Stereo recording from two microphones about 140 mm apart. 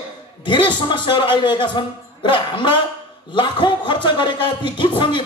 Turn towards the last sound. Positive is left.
turn(degrees=35)  # may be behind; listen again after turning